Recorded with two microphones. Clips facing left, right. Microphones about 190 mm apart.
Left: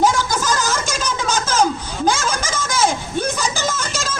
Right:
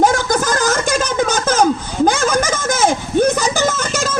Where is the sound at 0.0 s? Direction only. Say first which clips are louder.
Right 3 dB; 55° right (ahead or behind).